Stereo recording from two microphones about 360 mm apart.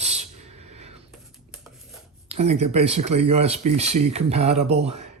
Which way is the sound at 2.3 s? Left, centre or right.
Centre.